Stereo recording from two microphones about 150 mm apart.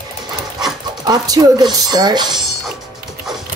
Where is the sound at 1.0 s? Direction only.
25° right (ahead or behind).